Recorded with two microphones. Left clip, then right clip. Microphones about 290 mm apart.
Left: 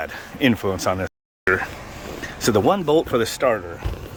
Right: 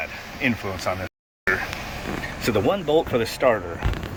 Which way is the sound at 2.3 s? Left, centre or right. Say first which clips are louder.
Left 4 dB; left.